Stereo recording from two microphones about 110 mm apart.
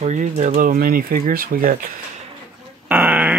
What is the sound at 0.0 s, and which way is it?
Speech, 90° right.